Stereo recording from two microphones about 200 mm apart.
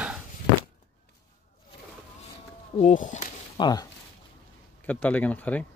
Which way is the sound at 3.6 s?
20° left (ahead or behind).